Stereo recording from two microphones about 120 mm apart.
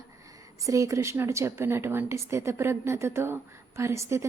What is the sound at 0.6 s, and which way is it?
A woman's voice, 25° right (ahead or behind).